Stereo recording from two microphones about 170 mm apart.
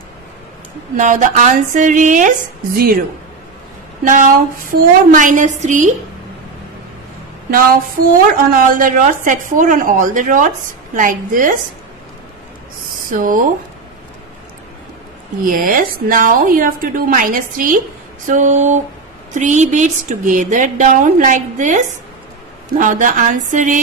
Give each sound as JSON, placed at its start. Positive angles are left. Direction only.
{"t": 0.9, "sound": "a woman's voice", "side_deg": -50}
{"t": 4.0, "sound": "a woman's voice", "side_deg": -50}
{"t": 8.1, "sound": "a woman's voice", "side_deg": -55}
{"t": 13.1, "sound": "a woman's voice", "side_deg": -55}
{"t": 15.4, "sound": "a woman's voice", "side_deg": -55}